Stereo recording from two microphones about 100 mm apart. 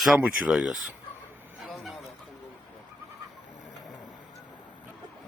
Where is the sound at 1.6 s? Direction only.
Centre (ahead or behind).